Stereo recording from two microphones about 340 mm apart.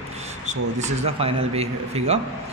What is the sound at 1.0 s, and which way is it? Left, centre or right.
A man's voice, centre.